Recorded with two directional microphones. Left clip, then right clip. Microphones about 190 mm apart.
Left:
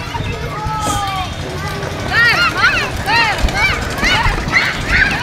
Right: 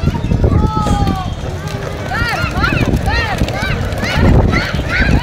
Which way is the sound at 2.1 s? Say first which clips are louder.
Left 7 dB; 60° right (ahead or behind).